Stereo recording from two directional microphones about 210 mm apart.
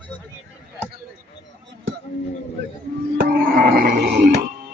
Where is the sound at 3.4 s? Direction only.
40° right (ahead or behind).